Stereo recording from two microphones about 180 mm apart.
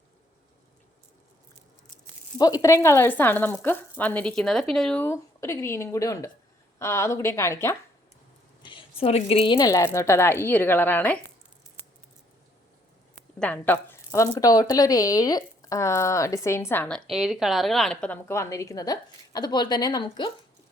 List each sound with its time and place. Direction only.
2.4 s speech: 20° left (ahead or behind)
8.6 s a woman's voice: 30° left (ahead or behind); by 11.2 s 10° left (ahead or behind)
13.4 s speech: 10° left (ahead or behind)
17.1 s speech: centre (ahead or behind); by 20.3 s 25° left (ahead or behind)